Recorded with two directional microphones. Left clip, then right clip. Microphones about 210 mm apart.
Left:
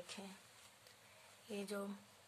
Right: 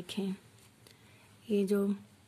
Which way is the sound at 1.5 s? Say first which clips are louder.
Right 15 dB; 30° right (ahead or behind).